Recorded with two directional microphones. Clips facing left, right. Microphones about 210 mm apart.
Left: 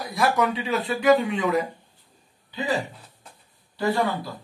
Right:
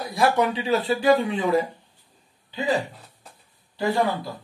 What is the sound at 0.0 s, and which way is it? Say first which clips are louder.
Speech: right 2 dB; 30° right (ahead or behind).